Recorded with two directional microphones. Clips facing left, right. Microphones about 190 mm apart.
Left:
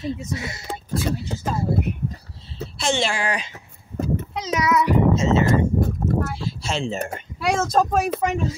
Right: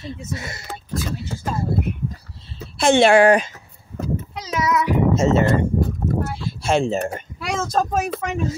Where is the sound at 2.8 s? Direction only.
55° right (ahead or behind).